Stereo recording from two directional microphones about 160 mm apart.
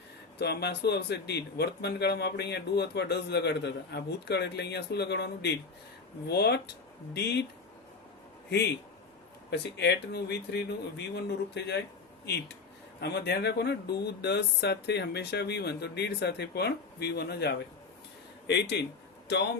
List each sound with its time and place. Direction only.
0.3 s a man's voice: 90° left
9.5 s a man's voice: 90° left